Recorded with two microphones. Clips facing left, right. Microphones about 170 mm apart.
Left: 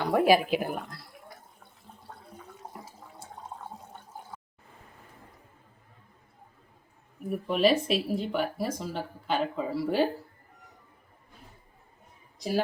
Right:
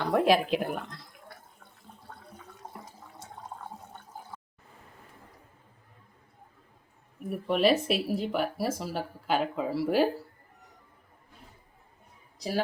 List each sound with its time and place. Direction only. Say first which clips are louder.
0.0 s speech: left 1 dB; 5° left (ahead or behind)
7.3 s speech: even; centre (ahead or behind)
12.4 s a woman's voice: left 2 dB; 5° left (ahead or behind)